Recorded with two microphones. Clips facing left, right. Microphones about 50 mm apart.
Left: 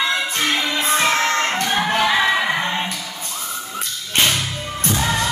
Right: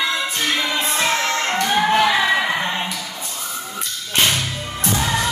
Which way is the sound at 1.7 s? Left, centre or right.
Centre.